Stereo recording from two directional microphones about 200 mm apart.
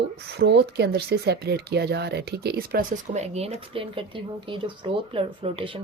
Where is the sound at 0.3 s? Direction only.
60° right (ahead or behind).